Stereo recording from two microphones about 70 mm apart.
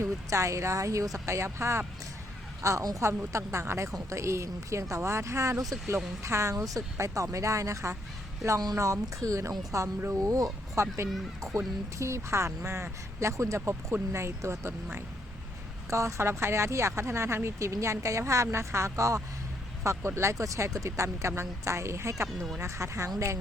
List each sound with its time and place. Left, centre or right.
0.0 s a woman's voice: right
8.4 s speech: right
8.7 s speech: right
10.2 s speech: right
15.9 s speech: right